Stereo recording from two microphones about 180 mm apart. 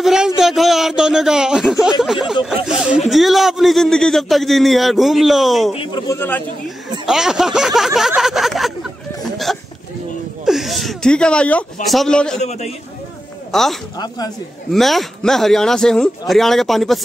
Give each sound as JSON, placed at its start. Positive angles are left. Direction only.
{"t": 0.0, "sound": "a sound", "side_deg": -5}
{"t": 3.1, "sound": "a man's voice", "side_deg": 0}
{"t": 5.8, "sound": "speech", "side_deg": 25}
{"t": 6.1, "sound": "speech", "side_deg": 10}
{"t": 7.1, "sound": "a man's voice", "side_deg": -5}
{"t": 8.2, "sound": "a sound", "side_deg": 0}
{"t": 10.4, "sound": "a man's voice", "side_deg": 0}
{"t": 12.4, "sound": "a man's voice", "side_deg": 40}
{"t": 13.5, "sound": "speech", "side_deg": 0}
{"t": 13.9, "sound": "speech", "side_deg": 20}
{"t": 14.7, "sound": "a man's voice", "side_deg": 0}